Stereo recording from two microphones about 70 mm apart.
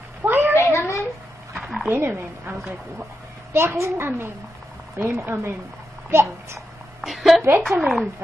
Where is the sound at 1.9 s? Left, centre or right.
Right.